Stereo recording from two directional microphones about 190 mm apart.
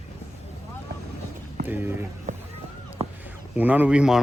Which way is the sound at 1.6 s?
10° right (ahead or behind).